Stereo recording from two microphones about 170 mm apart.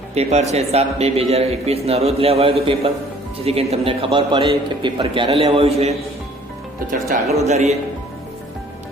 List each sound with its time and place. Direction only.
0.1 s a man's voice: 40° right (ahead or behind)
7.4 s a man's voice: 40° right (ahead or behind)